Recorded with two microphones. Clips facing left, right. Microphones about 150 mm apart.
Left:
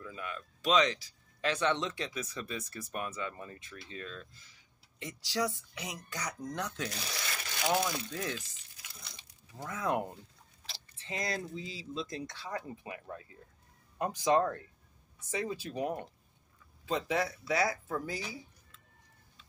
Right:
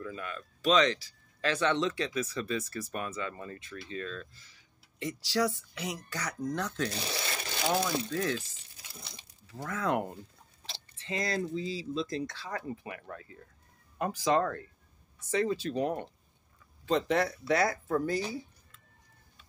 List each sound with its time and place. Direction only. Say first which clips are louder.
0.0 s speech: right 3 dB; 15° left (ahead or behind)
3.5 s speech: right 6 dB; 90° right
3.9 s speech: right 6 dB; 15° left (ahead or behind)
6.9 s crumpling: right 5 dB; 30° right (ahead or behind)
8.1 s speech: right 6 dB; 15° left (ahead or behind)
8.4 s a sound: right 5 dB; 30° right (ahead or behind)
9.5 s speech: right 2 dB; 15° left (ahead or behind)
10.6 s chewing: right 4 dB; 25° right (ahead or behind)
11.0 s speech: right 4 dB; 15° left (ahead or behind)